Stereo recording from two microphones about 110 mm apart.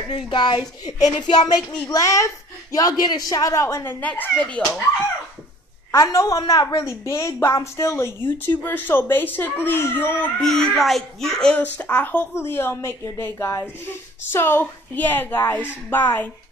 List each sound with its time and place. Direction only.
0.1 s a woman's voice: 45° left (ahead or behind); by 3.9 s 25° left (ahead or behind)
4.0 s a woman's voice: 15° left (ahead or behind)
5.9 s a woman's voice: 35° left (ahead or behind)
10.4 s a child's voice: 5° left (ahead or behind)
11.8 s a woman's voice: 15° left (ahead or behind)